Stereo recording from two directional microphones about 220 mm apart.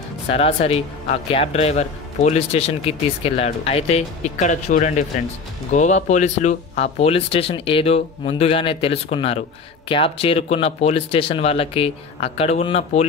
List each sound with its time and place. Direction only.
0.3 s speech: 25° left (ahead or behind)